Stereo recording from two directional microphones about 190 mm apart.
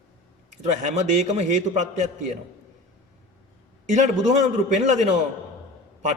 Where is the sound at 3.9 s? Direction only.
40° right (ahead or behind).